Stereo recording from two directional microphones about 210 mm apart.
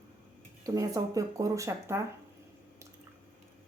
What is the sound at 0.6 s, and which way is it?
Speech, 15° right (ahead or behind).